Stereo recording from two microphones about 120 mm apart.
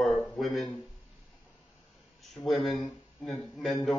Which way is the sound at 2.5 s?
Centre (ahead or behind).